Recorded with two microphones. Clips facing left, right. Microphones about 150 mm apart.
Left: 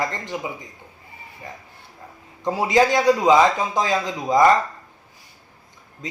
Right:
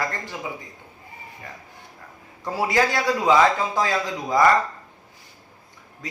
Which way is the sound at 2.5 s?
20° left (ahead or behind).